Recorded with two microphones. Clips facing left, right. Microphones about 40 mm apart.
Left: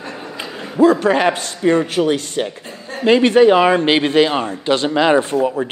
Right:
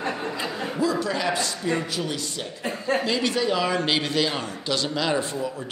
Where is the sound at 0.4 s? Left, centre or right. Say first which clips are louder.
Left 14 dB; left.